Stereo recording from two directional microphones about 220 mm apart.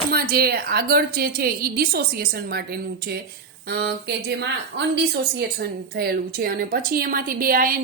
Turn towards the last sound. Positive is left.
turn(degrees=-40)  # may be behind; listen again after turning